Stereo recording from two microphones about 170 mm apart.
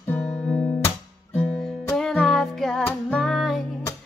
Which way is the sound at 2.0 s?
Centre (ahead or behind).